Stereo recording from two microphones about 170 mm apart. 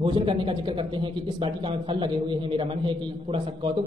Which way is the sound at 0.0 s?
30° right (ahead or behind).